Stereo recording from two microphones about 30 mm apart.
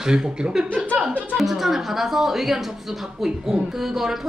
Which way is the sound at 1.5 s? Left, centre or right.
Centre.